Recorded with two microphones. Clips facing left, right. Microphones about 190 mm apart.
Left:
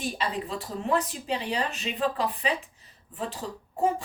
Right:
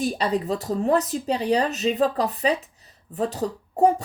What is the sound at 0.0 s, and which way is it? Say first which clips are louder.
Speech: right 7 dB; 40° right (ahead or behind).